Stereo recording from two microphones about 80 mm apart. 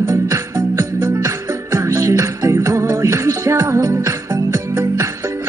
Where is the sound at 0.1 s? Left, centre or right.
Right.